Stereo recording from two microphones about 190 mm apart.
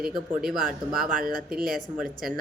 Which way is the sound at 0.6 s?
45° right (ahead or behind).